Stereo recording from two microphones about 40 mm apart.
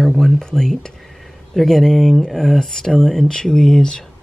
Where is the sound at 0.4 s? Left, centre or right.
Centre.